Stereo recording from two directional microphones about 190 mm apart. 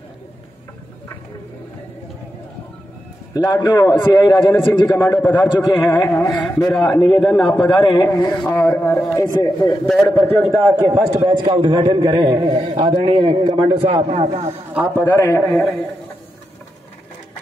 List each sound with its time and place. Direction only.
3.3 s a man's voice: 20° left (ahead or behind)
4.8 s a man's voice: 10° left (ahead or behind)
7.8 s a man's voice: 20° left (ahead or behind)
10.6 s a man's voice: 15° right (ahead or behind); by 14.5 s 35° right (ahead or behind)
15.0 s speech: 15° left (ahead or behind)